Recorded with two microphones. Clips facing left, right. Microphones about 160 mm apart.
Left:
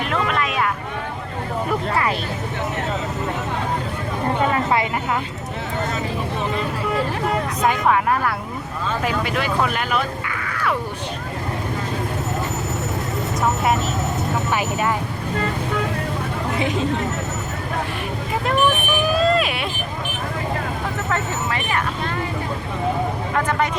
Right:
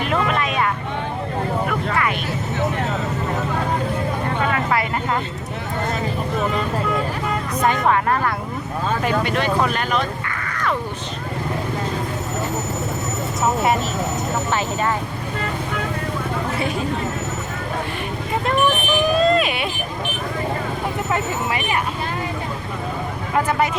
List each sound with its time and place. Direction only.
0.1 s speech: centre (ahead or behind)
7.6 s speech: centre (ahead or behind)
14.5 s speech: 10° left (ahead or behind)
16.6 s speech: 20° left (ahead or behind)
19.1 s vehicle: centre (ahead or behind)
21.1 s speech: 15° right (ahead or behind)
23.3 s speech: 10° right (ahead or behind)